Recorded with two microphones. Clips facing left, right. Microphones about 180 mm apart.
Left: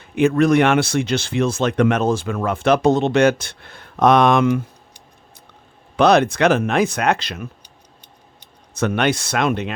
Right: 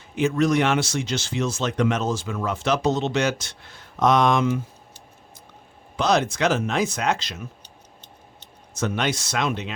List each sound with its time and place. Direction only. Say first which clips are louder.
0.0 s speech: left 5 dB; 60° left (ahead or behind)
6.0 s speech: left 7 dB; 60° left (ahead or behind)
8.7 s speech: left 6 dB; 60° left (ahead or behind)